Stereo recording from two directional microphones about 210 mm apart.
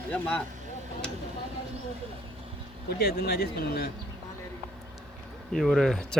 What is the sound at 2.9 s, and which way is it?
Speech, 50° left (ahead or behind).